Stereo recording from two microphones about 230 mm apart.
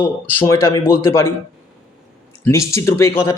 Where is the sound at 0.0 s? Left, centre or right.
Centre.